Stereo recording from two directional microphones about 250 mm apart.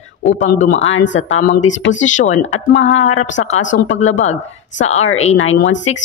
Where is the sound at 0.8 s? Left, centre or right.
Left.